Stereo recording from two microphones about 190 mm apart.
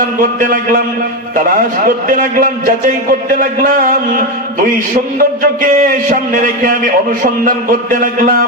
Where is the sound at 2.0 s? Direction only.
45° right (ahead or behind).